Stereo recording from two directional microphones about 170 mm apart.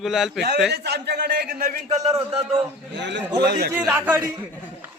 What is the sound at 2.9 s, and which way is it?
Speech, 90° right.